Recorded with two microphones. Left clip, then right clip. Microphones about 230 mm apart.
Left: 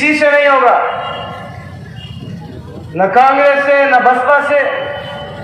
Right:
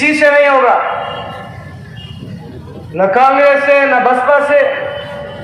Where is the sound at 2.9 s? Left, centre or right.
Right.